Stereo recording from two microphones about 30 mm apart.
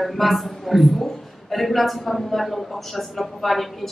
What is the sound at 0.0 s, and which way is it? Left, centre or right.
Speech, centre.